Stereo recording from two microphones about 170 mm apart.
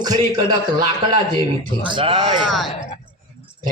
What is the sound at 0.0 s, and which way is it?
Speech, 25° right (ahead or behind).